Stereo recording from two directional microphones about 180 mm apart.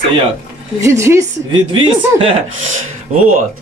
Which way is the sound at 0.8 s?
15° right (ahead or behind).